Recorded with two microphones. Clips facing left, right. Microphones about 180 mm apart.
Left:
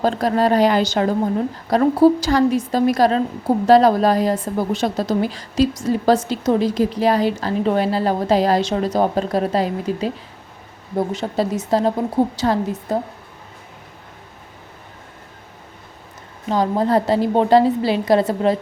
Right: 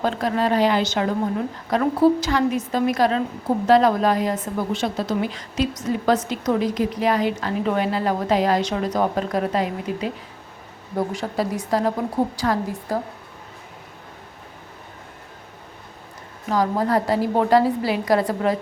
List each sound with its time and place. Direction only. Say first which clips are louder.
0.0 s a woman's voice: left 4 dB; 35° left (ahead or behind)
16.5 s a woman's voice: left 3 dB; 25° left (ahead or behind)